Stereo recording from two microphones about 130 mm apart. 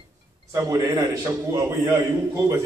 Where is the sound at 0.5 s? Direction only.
25° right (ahead or behind).